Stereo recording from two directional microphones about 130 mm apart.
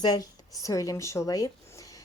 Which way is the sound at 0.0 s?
30° left (ahead or behind).